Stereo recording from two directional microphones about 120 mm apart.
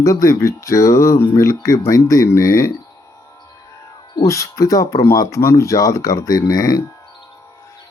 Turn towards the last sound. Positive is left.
turn(degrees=30)  # may be behind; listen again after turning